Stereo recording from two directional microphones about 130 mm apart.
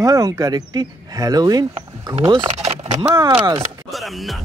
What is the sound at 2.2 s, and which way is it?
Speech, 45° right (ahead or behind).